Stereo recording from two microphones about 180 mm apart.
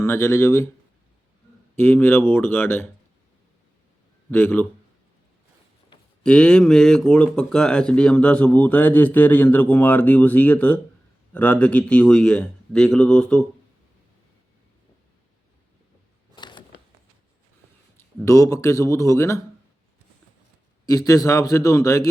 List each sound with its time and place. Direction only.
0.0 s speech: 15° left (ahead or behind)
1.7 s speech: 10° left (ahead or behind)
4.3 s speech: 10° left (ahead or behind)
6.2 s a man's voice: 5° left (ahead or behind)
16.3 s a sound: 25° left (ahead or behind)
18.3 s speech: 20° left (ahead or behind)
20.8 s speech: 20° left (ahead or behind)